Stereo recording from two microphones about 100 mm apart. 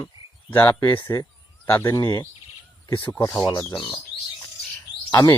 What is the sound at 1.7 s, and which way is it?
Speech, 20° left (ahead or behind).